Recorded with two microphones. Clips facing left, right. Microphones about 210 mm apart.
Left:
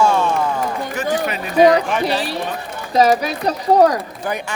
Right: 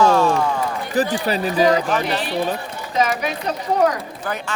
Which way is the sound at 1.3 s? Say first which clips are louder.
Left 6 dB; 35° right (ahead or behind).